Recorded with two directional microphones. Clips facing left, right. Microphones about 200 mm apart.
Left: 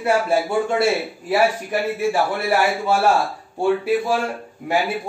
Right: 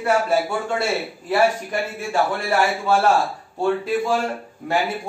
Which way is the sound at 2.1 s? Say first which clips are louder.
Left 1 dB; 10° left (ahead or behind).